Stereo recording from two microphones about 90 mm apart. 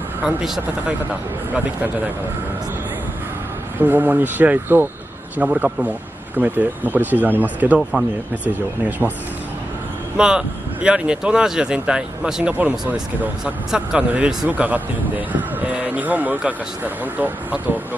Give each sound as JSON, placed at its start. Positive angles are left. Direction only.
{"t": 0.2, "sound": "speech", "side_deg": -10}
{"t": 3.8, "sound": "speech", "side_deg": -20}
{"t": 10.1, "sound": "speech", "side_deg": -10}